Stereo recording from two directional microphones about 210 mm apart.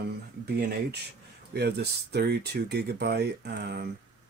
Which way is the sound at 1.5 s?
50° right (ahead or behind).